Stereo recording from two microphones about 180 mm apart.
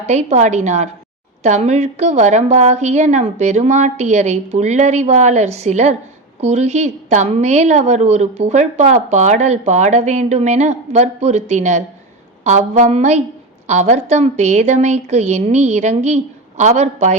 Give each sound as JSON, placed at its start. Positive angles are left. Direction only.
{"t": 0.0, "sound": "a woman's voice", "side_deg": -40}